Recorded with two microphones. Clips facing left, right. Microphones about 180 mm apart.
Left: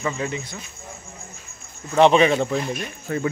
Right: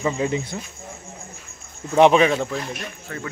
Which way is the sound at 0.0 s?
20° right (ahead or behind).